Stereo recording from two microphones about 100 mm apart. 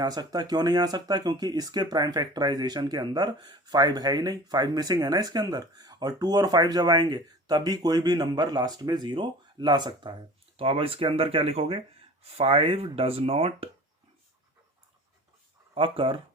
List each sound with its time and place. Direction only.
0.0 s speech: 45° right (ahead or behind)
10.6 s speech: 65° right (ahead or behind)
15.7 s speech: 65° right (ahead or behind)